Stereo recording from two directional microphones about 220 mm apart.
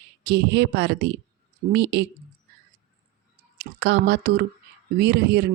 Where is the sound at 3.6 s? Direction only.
50° right (ahead or behind).